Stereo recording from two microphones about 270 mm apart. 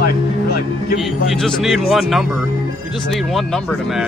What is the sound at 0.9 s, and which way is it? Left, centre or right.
Speech, centre.